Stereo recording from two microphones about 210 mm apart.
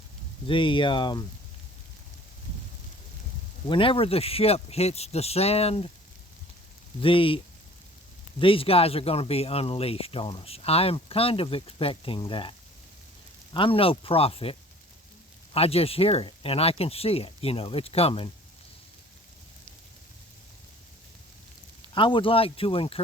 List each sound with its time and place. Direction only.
0.4 s speech: 25° left (ahead or behind)
3.7 s speech: 25° left (ahead or behind)
7.0 s speech: 25° left (ahead or behind)
15.5 s speech: 30° left (ahead or behind)
21.9 s speech: 25° left (ahead or behind)